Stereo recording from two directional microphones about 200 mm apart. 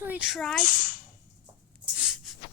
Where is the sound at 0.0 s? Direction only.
5° right (ahead or behind).